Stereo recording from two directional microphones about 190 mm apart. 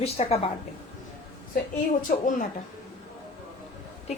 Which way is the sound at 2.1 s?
50° left (ahead or behind).